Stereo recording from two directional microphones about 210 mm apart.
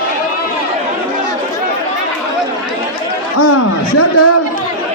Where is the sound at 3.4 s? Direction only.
90° left.